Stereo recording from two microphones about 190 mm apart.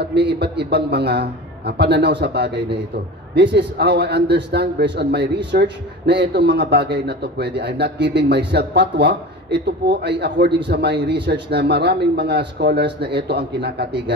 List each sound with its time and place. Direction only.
0.0 s a man's voice: 60° right (ahead or behind)